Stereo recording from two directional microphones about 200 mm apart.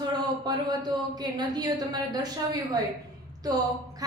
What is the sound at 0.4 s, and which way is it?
Speech, 20° right (ahead or behind).